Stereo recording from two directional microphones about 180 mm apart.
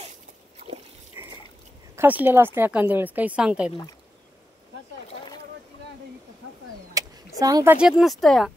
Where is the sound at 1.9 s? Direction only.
10° right (ahead or behind).